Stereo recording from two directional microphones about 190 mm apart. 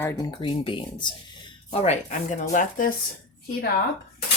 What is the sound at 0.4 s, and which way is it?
Speech, 25° left (ahead or behind).